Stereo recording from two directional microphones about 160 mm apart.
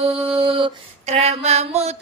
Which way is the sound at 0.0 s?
35° right (ahead or behind).